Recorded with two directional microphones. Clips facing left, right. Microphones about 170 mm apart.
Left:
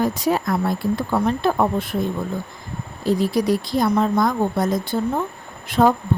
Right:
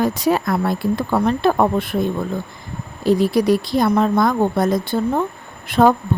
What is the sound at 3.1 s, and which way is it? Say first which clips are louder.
Speech: right 4 dB; 65° right (ahead or behind).